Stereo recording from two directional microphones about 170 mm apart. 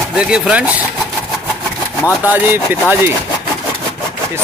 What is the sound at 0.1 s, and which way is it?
Speech, 5° right (ahead or behind).